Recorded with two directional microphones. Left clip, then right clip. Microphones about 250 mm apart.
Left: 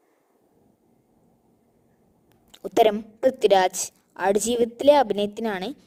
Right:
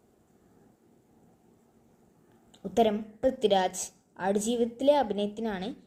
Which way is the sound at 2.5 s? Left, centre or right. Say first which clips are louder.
Left 7 dB; left.